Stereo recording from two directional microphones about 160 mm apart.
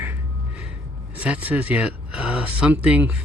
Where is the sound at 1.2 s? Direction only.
10° right (ahead or behind).